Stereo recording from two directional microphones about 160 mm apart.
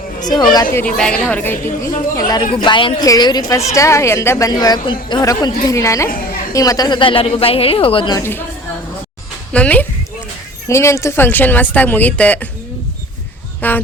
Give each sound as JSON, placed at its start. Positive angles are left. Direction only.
{"t": 0.2, "sound": "a woman's voice", "side_deg": 25}
{"t": 0.9, "sound": "a woman's voice", "side_deg": 5}
{"t": 1.9, "sound": "a woman's voice", "side_deg": 25}
{"t": 8.2, "sound": "a woman's voice", "side_deg": 15}
{"t": 9.5, "sound": "a woman's voice", "side_deg": 10}
{"t": 13.6, "sound": "a woman's voice", "side_deg": 10}